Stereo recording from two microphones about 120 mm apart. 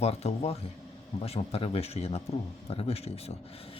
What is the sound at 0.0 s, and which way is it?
A man's voice, 60° left (ahead or behind).